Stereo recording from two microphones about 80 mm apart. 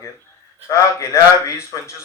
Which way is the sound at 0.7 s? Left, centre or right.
Left.